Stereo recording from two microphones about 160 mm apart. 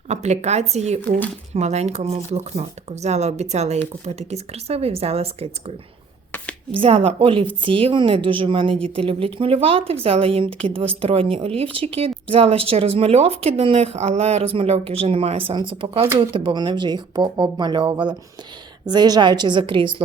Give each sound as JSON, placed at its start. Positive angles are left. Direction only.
{"t": 0.1, "sound": "a woman's voice", "side_deg": -45}